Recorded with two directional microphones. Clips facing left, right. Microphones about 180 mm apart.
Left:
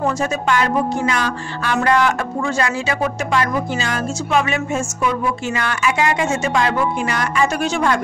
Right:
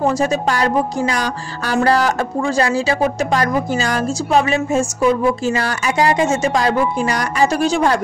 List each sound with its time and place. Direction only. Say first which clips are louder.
0.0 s speech: right 3 dB; 35° right (ahead or behind)